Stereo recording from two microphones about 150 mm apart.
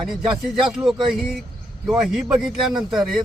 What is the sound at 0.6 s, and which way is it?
Speech, 5° right (ahead or behind).